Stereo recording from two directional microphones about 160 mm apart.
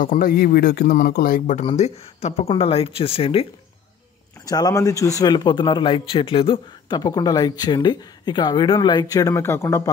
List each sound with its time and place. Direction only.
0.0 s speech: 60° left (ahead or behind)
1.6 s speech: 40° left (ahead or behind)
4.5 s speech: 25° left (ahead or behind)